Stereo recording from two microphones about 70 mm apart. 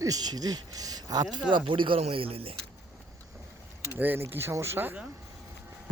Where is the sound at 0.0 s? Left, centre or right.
Right.